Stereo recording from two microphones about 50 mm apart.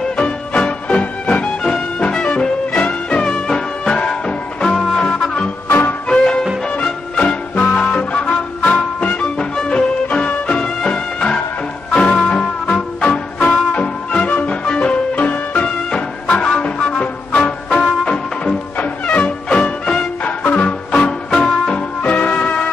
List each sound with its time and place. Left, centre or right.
0.6 s music: left
5.7 s music: left
6.0 s music: centre
9.4 s music: centre
20.2 s music: left
20.6 s music: centre